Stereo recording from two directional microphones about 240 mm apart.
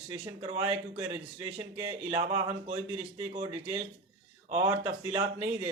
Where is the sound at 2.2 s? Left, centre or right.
Right.